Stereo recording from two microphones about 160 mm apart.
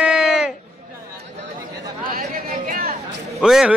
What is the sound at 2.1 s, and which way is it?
Chatter, 65° right (ahead or behind).